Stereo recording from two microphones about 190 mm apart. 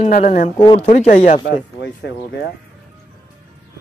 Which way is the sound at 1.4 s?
65° left (ahead or behind).